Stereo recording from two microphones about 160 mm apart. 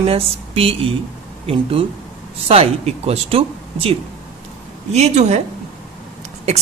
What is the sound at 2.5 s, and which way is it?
A man's voice, 40° right (ahead or behind).